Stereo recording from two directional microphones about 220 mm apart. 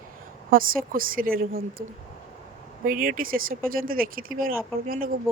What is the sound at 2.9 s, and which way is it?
Speech, 40° right (ahead or behind).